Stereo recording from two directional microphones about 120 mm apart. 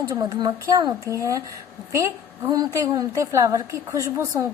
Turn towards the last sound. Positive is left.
turn(degrees=-25)  # may be behind; listen again after turning